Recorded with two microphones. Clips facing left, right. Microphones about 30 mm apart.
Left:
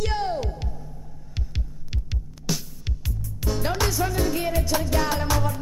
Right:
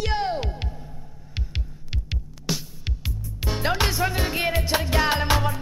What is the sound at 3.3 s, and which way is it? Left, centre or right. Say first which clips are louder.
Music: right 1 dB; right.